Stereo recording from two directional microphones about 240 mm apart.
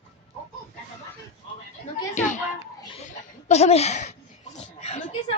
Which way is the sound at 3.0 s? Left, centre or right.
Left.